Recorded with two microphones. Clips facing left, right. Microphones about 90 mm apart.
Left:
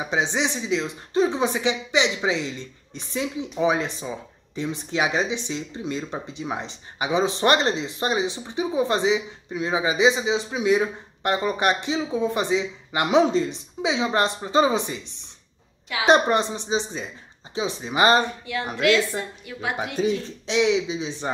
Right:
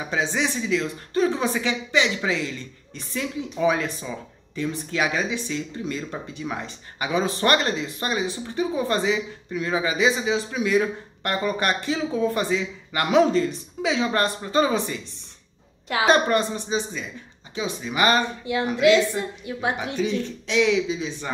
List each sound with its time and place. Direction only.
0.0 s speech: 20° left (ahead or behind)
16.1 s speech: 20° left (ahead or behind)
18.4 s a woman's voice: 25° right (ahead or behind)
20.0 s speech: 35° left (ahead or behind)